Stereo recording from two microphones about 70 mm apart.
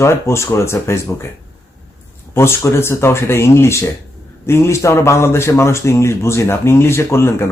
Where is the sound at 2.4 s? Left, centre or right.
Left.